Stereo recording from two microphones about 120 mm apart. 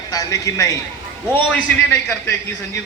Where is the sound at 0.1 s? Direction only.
30° left (ahead or behind).